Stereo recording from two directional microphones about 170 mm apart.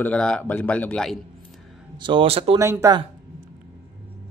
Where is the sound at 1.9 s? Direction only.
30° right (ahead or behind).